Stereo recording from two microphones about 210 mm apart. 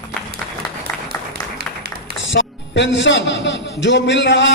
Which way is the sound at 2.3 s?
60° left (ahead or behind).